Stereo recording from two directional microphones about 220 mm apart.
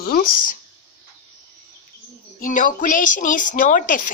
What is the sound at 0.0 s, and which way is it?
Speech, 40° left (ahead or behind).